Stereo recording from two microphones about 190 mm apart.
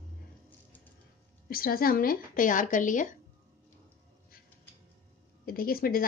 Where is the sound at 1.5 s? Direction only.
50° left (ahead or behind).